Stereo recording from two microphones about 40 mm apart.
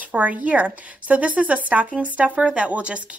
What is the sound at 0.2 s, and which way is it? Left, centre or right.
Speech, right.